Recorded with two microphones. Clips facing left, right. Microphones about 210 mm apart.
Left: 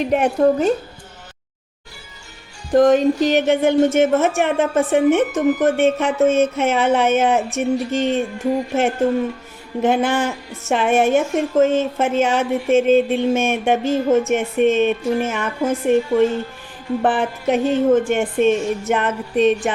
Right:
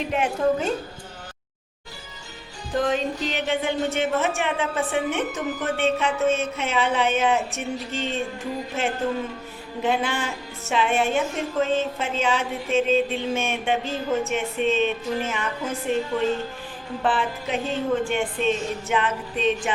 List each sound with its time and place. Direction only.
0.1 s a woman's voice: 40° left (ahead or behind)
2.7 s a woman's voice: 45° left (ahead or behind)
9.8 s a woman's voice: 50° left (ahead or behind)
17.0 s a woman's voice: 50° left (ahead or behind)